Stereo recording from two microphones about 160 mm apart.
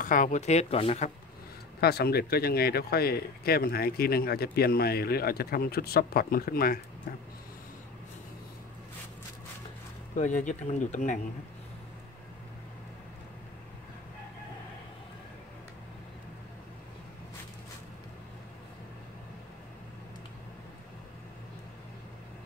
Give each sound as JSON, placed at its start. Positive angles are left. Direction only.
{"t": 0.0, "sound": "speech", "side_deg": 55}
{"t": 1.8, "sound": "speech", "side_deg": 80}
{"t": 10.1, "sound": "speech", "side_deg": 50}